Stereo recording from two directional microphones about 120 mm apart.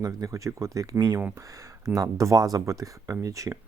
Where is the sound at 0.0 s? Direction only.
25° right (ahead or behind).